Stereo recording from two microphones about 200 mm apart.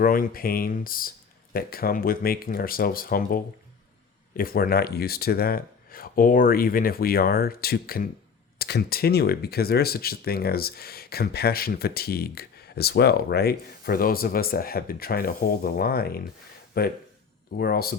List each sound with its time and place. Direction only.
0.0 s speech: 45° left (ahead or behind)